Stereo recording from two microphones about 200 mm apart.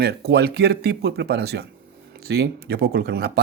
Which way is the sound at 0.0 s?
55° right (ahead or behind).